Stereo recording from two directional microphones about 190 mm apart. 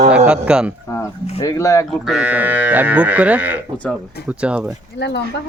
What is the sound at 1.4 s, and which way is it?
Speech, 15° left (ahead or behind).